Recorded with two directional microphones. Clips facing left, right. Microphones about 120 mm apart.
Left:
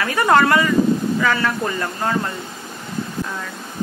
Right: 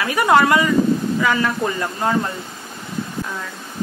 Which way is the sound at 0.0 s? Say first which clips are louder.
Even; 15° right (ahead or behind).